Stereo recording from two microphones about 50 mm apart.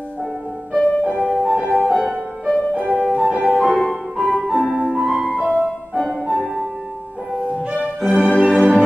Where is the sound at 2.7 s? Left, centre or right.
Right.